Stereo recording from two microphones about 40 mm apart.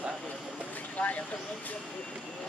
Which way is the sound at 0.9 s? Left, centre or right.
Left.